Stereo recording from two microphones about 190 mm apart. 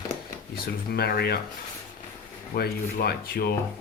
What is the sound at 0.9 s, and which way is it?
Speech, 55° left (ahead or behind).